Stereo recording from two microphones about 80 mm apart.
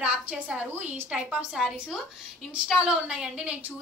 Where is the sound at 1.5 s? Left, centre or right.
Centre.